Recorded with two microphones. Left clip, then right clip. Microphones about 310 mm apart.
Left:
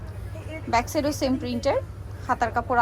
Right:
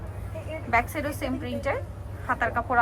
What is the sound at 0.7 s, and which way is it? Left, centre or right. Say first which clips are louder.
Speech: left 2 dB; centre.